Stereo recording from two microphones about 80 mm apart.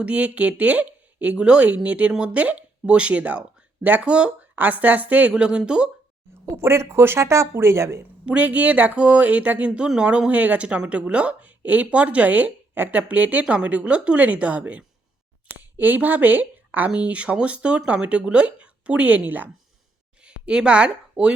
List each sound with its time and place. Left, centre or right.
0.0 s speech: centre
6.4 s speech: right
8.2 s speech: centre